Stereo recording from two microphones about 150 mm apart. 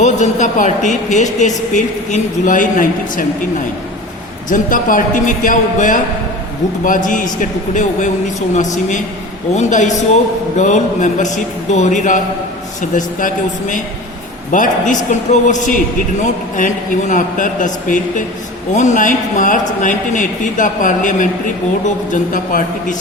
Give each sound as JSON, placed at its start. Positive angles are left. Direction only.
{"t": 0.0, "sound": "a man's voice", "side_deg": 50}
{"t": 4.4, "sound": "a man's voice", "side_deg": 60}